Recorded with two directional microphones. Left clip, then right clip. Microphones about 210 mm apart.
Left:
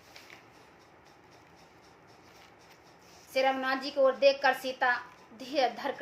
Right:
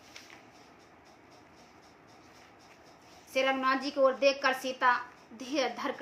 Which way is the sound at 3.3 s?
15° right (ahead or behind).